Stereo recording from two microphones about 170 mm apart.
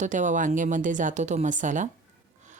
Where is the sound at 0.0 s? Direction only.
45° right (ahead or behind).